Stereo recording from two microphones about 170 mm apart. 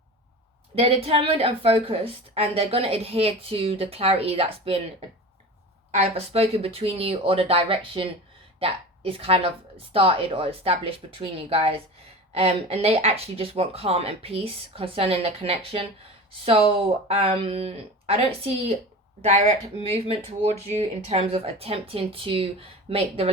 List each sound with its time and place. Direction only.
0.8 s a woman's voice: 35° right (ahead or behind)